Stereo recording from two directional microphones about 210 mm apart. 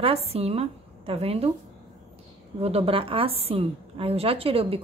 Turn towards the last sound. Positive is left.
turn(degrees=-25)  # may be behind; listen again after turning